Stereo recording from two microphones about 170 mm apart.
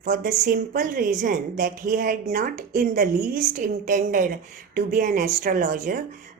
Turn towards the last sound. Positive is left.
turn(degrees=-50)  # may be behind; listen again after turning